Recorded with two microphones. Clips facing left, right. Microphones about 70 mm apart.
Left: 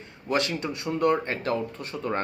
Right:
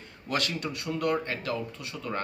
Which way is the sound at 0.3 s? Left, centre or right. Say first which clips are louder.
Left 4 dB; left.